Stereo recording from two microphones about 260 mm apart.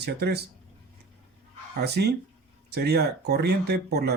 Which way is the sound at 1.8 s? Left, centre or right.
Right.